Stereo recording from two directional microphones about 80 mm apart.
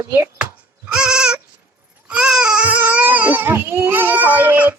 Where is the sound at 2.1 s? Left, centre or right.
Centre.